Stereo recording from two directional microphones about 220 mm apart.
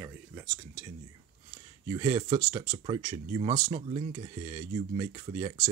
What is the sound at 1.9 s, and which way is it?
Speech, 20° right (ahead or behind).